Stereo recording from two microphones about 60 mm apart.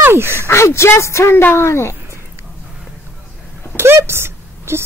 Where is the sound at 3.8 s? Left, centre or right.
Right.